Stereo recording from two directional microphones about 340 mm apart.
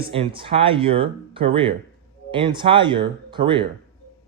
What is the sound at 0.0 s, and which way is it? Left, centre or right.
Speech, centre.